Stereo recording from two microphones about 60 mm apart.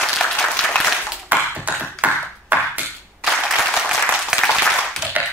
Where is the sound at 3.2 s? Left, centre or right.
Centre.